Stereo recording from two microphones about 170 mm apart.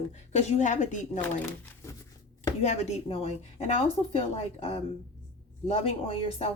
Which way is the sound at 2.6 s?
40° left (ahead or behind).